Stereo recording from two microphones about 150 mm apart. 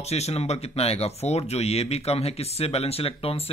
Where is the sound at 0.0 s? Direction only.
45° left (ahead or behind).